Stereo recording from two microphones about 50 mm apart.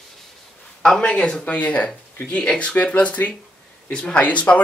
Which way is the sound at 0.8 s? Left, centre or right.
Centre.